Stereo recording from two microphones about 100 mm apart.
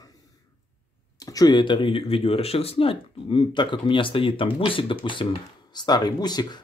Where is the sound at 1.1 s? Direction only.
40° left (ahead or behind); by 5.4 s 65° left (ahead or behind).